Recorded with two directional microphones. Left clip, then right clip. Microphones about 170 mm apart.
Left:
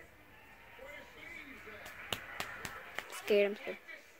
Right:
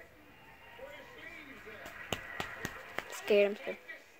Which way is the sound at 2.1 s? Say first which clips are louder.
Right 1 dB; 25° right (ahead or behind).